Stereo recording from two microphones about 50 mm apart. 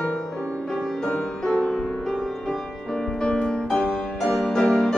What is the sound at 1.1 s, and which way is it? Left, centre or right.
Music, centre.